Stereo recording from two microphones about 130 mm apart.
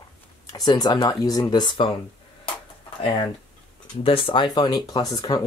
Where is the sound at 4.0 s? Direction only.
45° left (ahead or behind).